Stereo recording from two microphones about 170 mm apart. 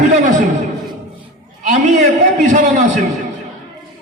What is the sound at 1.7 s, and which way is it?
A man's voice, 45° right (ahead or behind).